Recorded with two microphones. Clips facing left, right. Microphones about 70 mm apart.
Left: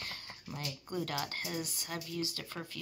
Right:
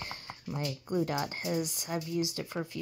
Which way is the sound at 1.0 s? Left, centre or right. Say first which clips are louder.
Right 5 dB; right.